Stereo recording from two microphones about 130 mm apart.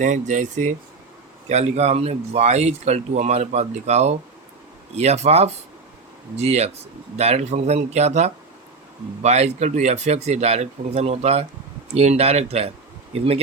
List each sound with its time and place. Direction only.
0.0 s speech: 70° right (ahead or behind)
1.5 s speech: 55° right (ahead or behind)